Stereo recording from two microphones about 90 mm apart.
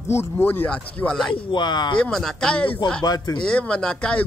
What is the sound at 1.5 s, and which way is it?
Speech, 60° left (ahead or behind).